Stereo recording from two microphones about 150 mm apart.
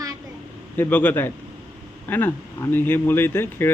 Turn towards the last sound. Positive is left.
turn(degrees=15)  # may be behind; listen again after turning